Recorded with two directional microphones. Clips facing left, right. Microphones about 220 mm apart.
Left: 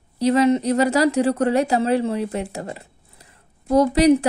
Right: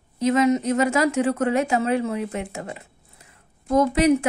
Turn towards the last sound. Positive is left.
turn(degrees=35)  # may be behind; listen again after turning